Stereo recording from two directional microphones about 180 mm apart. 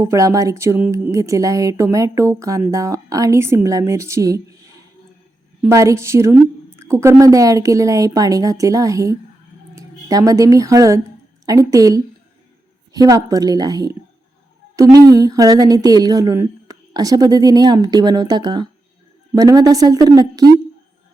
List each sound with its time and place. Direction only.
0.0 s speech: 15° right (ahead or behind)
5.6 s speech: 15° right (ahead or behind)
15.1 s speech: 20° right (ahead or behind)